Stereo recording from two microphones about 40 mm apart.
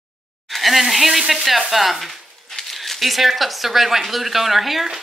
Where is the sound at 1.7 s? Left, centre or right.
Centre.